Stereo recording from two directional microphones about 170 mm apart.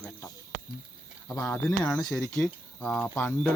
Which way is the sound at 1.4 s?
15° left (ahead or behind).